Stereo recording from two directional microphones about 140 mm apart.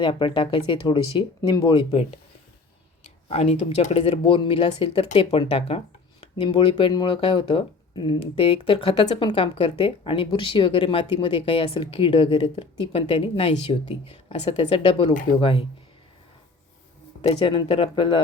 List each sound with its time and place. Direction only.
0.0 s speech: 35° left (ahead or behind)
1.4 s speech: 25° left (ahead or behind); by 2.1 s 45° left (ahead or behind)
3.2 s speech: 45° left (ahead or behind)
15.1 s speech: 80° left
15.4 s speech: 40° left (ahead or behind)
17.4 s speech: 35° left (ahead or behind)